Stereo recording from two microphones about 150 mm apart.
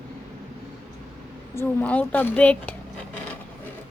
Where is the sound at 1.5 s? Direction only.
10° left (ahead or behind).